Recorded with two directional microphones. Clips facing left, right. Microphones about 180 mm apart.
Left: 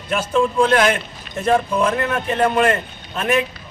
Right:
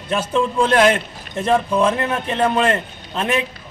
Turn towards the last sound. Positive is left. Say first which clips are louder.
# left 2 dB
turn(degrees=-25)  # may be behind; listen again after turning